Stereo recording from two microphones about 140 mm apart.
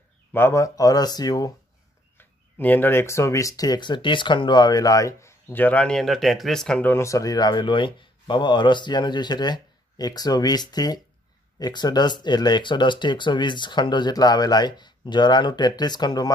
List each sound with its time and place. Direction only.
0.3 s speech: 15° left (ahead or behind)
2.1 s speech: 15° left (ahead or behind)
6.9 s speech: 20° left (ahead or behind)